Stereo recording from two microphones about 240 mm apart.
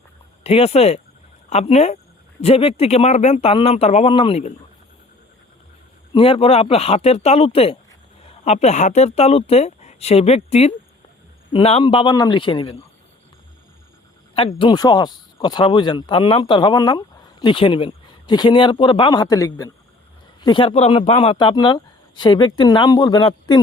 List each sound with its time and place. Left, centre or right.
0.4 s a man's voice: left
6.1 s a man's voice: left
14.3 s a man's voice: left